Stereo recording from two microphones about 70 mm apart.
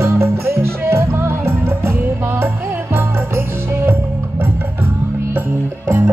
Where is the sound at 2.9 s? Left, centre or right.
Right.